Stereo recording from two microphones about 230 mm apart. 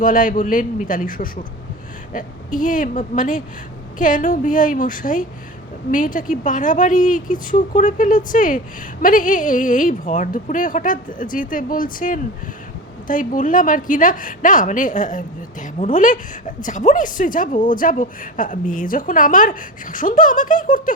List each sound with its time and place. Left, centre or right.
0.0 s a woman's voice: left